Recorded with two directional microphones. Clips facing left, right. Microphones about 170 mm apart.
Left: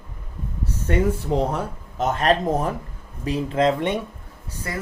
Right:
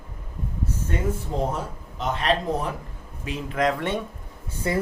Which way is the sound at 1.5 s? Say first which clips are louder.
Left 4 dB; 45° left (ahead or behind).